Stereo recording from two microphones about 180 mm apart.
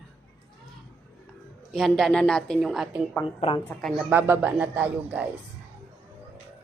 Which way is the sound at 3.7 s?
Centre (ahead or behind).